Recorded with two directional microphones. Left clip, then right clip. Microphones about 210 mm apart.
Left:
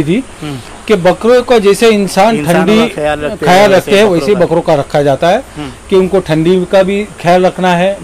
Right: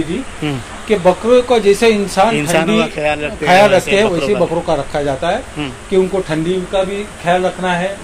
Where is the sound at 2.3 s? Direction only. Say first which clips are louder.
Left 3 dB; 20° left (ahead or behind).